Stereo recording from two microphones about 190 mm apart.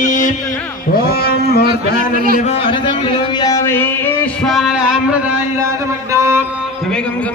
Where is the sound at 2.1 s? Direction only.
50° right (ahead or behind).